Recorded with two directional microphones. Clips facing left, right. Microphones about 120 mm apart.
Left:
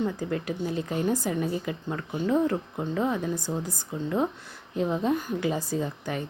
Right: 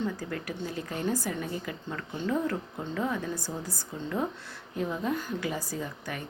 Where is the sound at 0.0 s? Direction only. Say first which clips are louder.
Left 4 dB; 20° left (ahead or behind).